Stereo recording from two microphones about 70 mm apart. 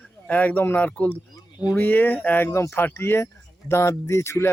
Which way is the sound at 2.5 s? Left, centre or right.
Left.